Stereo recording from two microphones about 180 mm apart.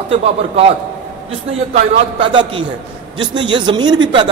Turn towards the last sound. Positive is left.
turn(degrees=-25)  # may be behind; listen again after turning